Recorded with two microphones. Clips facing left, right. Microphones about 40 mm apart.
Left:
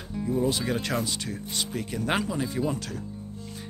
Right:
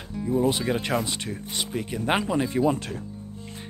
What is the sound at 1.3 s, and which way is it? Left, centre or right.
Speech, centre.